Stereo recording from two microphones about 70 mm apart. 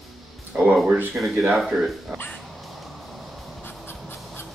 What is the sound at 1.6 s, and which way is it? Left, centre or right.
Speech, centre.